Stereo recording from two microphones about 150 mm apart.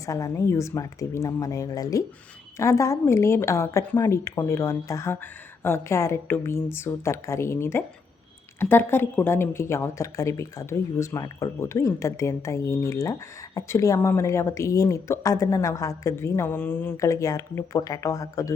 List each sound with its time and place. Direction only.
0.0 s a woman's voice: 20° left (ahead or behind)